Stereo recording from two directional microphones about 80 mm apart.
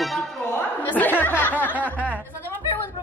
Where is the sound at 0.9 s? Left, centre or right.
Left.